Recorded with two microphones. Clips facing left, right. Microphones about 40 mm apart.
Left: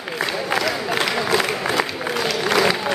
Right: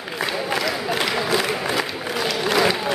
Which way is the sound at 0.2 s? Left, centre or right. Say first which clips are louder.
Left 1 dB; centre.